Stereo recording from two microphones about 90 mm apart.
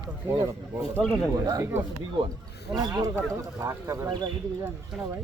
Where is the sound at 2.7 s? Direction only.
45° right (ahead or behind).